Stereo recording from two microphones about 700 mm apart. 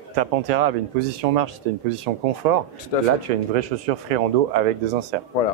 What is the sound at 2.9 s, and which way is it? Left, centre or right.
Speech, left.